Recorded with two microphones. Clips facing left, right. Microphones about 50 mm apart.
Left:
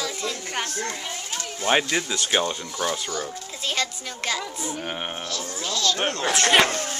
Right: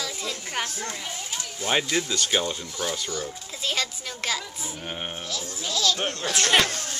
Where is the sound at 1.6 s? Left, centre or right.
Centre.